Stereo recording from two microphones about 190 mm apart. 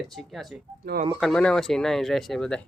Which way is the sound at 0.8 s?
55° right (ahead or behind).